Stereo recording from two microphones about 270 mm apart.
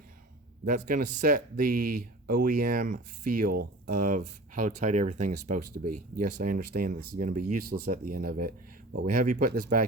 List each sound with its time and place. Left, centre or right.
0.6 s speech: right